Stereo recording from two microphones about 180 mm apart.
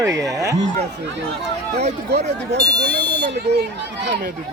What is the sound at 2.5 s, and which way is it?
Speech, 70° right (ahead or behind).